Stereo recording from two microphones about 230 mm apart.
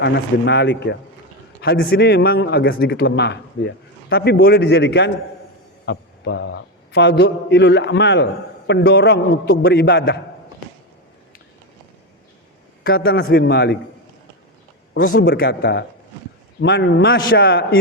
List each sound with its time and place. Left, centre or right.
0.0 s a man's voice: left
12.8 s a man's voice: left
14.9 s a man's voice: left